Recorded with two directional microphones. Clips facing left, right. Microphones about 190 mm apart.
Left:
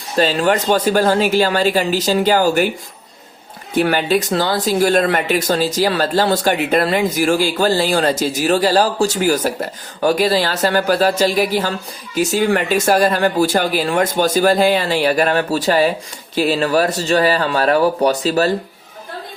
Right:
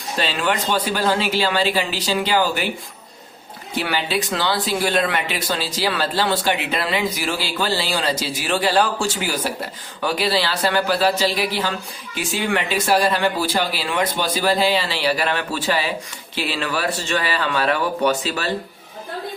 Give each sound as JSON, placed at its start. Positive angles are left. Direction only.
{"t": 0.2, "sound": "speech", "side_deg": 40}
{"t": 3.8, "sound": "speech", "side_deg": 50}